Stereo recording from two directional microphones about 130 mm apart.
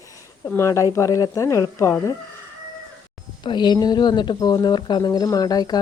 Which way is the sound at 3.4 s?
35° left (ahead or behind).